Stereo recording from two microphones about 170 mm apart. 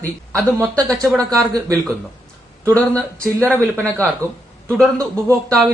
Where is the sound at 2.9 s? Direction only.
5° left (ahead or behind).